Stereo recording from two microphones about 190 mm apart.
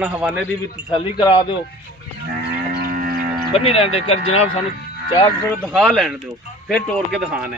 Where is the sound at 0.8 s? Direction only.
25° left (ahead or behind).